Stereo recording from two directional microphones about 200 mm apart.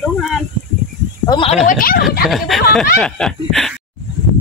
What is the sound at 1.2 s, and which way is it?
Snake, 20° left (ahead or behind).